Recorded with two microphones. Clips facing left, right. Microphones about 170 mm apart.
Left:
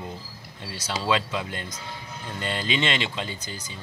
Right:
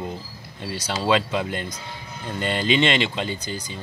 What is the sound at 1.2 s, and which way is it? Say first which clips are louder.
Speech: right 5 dB; 65° right (ahead or behind).